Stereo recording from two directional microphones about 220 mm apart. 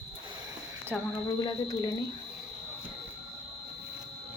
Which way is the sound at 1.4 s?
15° left (ahead or behind).